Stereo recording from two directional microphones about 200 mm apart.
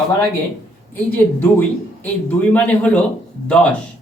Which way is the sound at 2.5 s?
5° left (ahead or behind).